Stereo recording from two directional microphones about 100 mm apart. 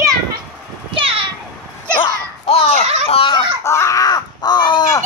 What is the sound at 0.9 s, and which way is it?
Children playing, 65° right (ahead or behind).